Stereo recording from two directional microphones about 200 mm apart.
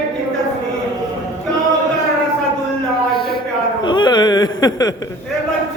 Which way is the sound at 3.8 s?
20° left (ahead or behind).